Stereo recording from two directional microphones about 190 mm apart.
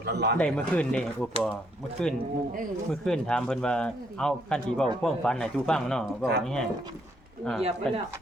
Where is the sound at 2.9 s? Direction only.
5° left (ahead or behind).